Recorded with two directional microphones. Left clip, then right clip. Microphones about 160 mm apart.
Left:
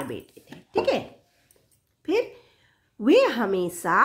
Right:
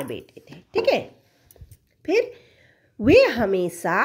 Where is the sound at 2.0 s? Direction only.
30° right (ahead or behind).